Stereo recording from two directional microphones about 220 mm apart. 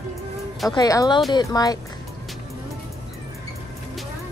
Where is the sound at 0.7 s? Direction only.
15° left (ahead or behind).